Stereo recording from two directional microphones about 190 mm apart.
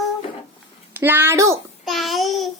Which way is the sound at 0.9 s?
10° right (ahead or behind).